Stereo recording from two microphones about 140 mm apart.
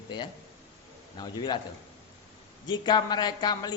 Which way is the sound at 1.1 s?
30° left (ahead or behind).